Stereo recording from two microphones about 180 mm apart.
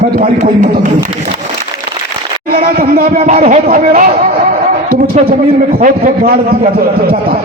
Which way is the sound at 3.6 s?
55° right (ahead or behind).